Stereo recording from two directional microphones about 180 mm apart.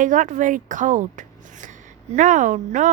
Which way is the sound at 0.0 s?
45° right (ahead or behind).